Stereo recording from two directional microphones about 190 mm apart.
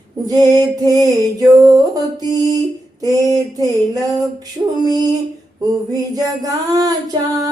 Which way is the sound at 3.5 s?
20° right (ahead or behind).